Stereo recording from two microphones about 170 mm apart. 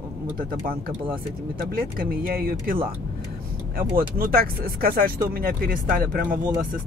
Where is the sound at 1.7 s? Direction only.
60° right (ahead or behind).